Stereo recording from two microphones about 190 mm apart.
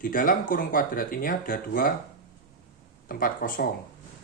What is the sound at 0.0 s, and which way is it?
Speech, 45° left (ahead or behind).